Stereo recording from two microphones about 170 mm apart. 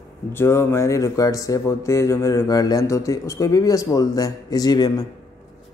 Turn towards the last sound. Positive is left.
turn(degrees=25)  # may be behind; listen again after turning